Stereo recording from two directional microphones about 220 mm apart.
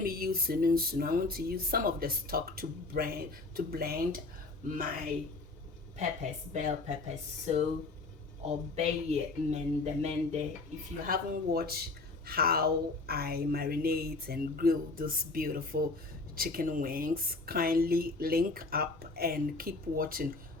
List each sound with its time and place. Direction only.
0.0 s speech: 40° right (ahead or behind)
6.5 s speech: 35° right (ahead or behind)
8.7 s speech: 30° right (ahead or behind)
11.0 s a woman's voice: 45° right (ahead or behind)